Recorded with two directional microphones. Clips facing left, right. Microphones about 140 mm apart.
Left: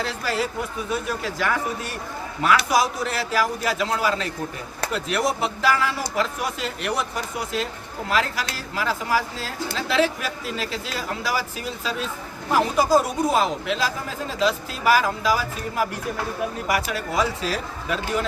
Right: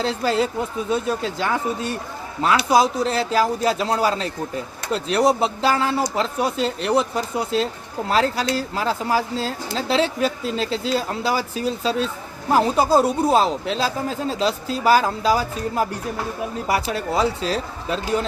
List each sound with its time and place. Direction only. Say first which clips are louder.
0.0 s a man's voice: right 5 dB; 25° right (ahead or behind)